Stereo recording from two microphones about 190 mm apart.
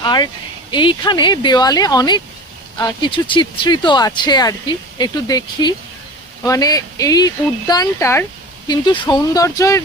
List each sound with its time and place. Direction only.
0.0 s speech: 25° left (ahead or behind)